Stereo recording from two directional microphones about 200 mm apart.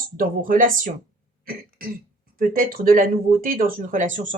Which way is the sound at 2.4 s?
45° right (ahead or behind).